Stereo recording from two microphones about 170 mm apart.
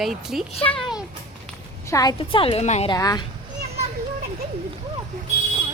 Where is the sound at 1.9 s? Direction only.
25° left (ahead or behind); by 2.8 s 40° left (ahead or behind).